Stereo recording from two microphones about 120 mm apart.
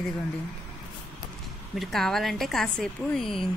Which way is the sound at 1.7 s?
Centre (ahead or behind).